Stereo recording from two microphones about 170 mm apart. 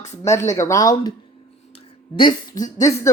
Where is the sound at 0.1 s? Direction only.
15° left (ahead or behind).